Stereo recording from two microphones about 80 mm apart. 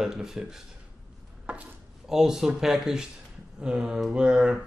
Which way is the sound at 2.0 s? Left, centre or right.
Centre.